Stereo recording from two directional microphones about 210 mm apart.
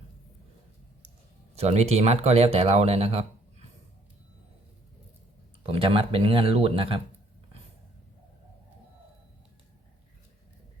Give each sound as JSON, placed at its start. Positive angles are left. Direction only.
{"t": 1.5, "sound": "speech", "side_deg": -30}
{"t": 5.6, "sound": "speech", "side_deg": -25}